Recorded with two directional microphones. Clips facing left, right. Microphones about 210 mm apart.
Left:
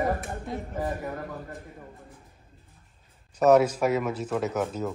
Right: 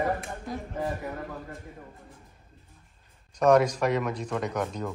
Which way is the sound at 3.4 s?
5° left (ahead or behind).